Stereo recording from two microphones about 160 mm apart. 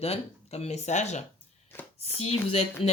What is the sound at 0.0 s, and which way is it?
A woman's voice, 40° left (ahead or behind).